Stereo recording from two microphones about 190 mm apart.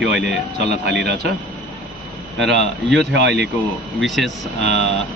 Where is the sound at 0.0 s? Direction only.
65° right (ahead or behind).